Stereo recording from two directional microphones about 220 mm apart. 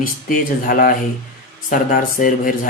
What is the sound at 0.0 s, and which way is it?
Speech, 40° left (ahead or behind).